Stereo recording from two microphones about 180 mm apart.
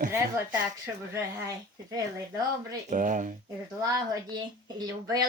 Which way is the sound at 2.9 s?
45° right (ahead or behind).